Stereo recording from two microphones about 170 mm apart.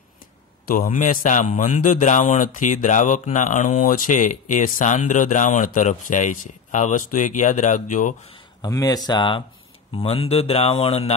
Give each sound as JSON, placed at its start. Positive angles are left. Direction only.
{"t": 0.7, "sound": "a man's voice", "side_deg": 50}
{"t": 8.6, "sound": "speech", "side_deg": 20}